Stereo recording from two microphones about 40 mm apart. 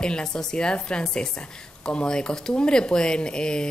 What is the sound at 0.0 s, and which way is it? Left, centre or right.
Speech, centre.